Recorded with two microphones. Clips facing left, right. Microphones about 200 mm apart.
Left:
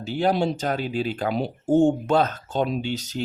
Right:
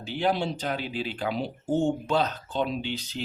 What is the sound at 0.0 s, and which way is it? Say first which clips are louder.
Speech: left 5 dB; 45° left (ahead or behind).